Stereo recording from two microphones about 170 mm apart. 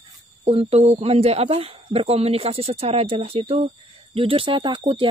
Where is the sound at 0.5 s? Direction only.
35° right (ahead or behind).